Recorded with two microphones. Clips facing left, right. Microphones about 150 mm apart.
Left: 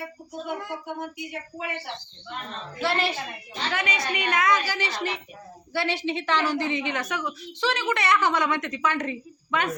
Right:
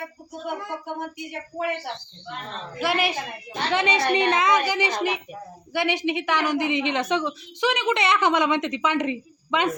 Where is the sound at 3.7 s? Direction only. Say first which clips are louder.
Right 8 dB; 25° right (ahead or behind).